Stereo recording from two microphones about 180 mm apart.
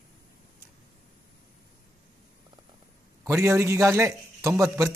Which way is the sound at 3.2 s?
15° right (ahead or behind).